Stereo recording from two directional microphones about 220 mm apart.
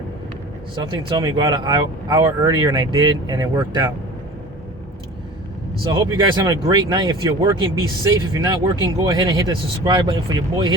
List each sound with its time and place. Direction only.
0.8 s speech: 20° right (ahead or behind)
5.8 s speech: 20° right (ahead or behind)